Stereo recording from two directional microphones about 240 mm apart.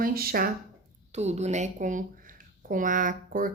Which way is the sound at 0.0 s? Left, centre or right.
Right.